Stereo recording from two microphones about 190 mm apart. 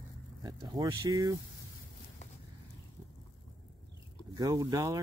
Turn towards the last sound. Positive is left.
turn(degrees=-20)  # may be behind; listen again after turning